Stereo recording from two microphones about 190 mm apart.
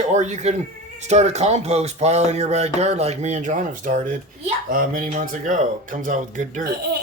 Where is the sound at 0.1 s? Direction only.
35° right (ahead or behind).